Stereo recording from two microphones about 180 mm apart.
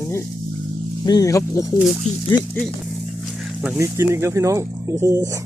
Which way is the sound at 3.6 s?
10° right (ahead or behind).